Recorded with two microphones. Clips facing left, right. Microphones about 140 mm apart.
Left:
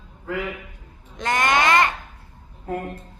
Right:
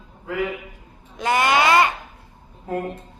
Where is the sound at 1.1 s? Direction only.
10° right (ahead or behind).